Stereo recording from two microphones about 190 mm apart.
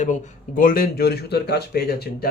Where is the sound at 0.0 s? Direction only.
40° left (ahead or behind).